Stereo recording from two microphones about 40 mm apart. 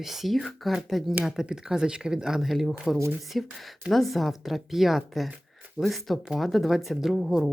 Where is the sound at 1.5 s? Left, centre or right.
Centre.